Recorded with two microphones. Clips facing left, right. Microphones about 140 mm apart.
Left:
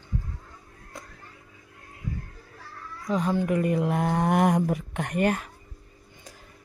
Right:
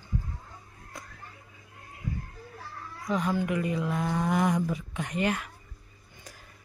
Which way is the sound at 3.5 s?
50° left (ahead or behind).